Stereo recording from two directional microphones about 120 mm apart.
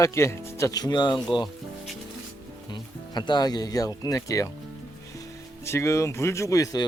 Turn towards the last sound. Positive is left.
turn(degrees=30)  # may be behind; listen again after turning